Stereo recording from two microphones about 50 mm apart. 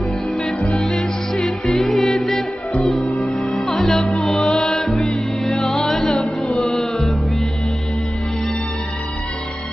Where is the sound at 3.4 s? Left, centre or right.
Centre.